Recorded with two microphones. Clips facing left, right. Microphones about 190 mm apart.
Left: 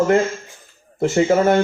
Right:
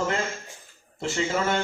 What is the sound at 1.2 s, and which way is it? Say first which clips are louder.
Speech: left 11 dB; 55° left (ahead or behind).